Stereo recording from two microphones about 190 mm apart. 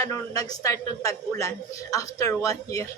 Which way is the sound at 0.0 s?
15° left (ahead or behind).